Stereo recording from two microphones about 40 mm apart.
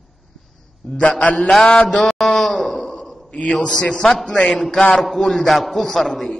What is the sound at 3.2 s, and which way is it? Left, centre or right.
Speech, left.